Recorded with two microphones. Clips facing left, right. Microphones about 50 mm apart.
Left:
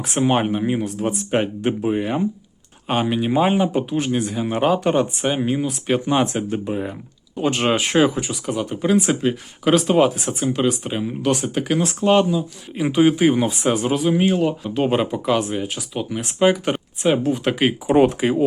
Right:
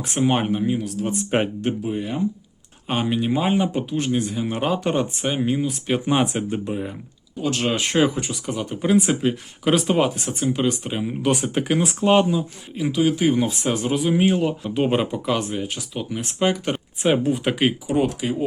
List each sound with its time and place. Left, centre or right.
0.0 s speech: centre
0.6 s speech: left
1.3 s speech: centre
1.8 s speech: left
2.8 s speech: centre
6.7 s speech: centre
7.5 s speech: left
7.8 s speech: centre
11.2 s speech: centre
12.9 s speech: left
13.1 s speech: centre
17.0 s speech: centre
17.8 s speech: left